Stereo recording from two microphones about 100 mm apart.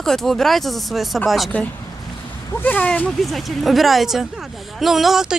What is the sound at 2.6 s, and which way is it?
Speech, 15° left (ahead or behind).